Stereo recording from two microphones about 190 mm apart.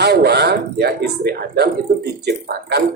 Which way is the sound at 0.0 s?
60° right (ahead or behind).